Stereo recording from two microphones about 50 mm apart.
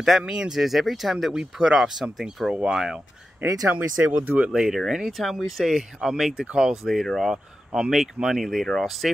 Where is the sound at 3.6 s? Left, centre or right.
Right.